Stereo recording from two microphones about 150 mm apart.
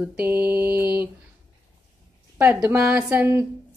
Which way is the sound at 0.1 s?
10° right (ahead or behind).